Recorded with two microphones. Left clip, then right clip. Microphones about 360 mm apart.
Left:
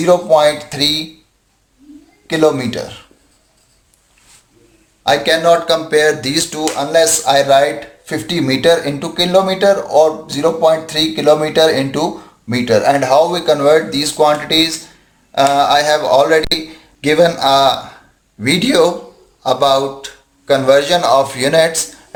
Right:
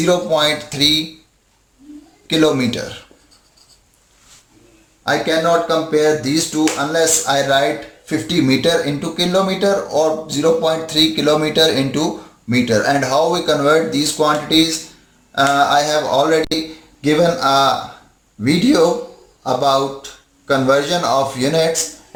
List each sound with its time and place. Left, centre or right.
0.1 s speech: left
2.2 s speech: left
5.0 s speech: left
19.5 s speech: left